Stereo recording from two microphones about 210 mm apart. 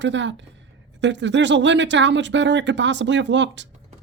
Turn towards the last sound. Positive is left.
turn(degrees=-60)  # may be behind; listen again after turning